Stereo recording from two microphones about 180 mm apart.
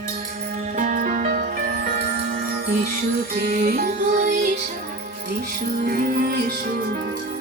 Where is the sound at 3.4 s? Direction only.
50° right (ahead or behind).